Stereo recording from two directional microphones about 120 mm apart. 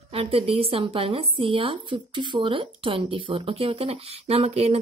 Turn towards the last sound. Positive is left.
turn(degrees=-60)  # may be behind; listen again after turning